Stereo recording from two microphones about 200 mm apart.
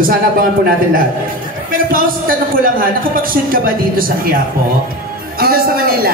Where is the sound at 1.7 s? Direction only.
45° right (ahead or behind).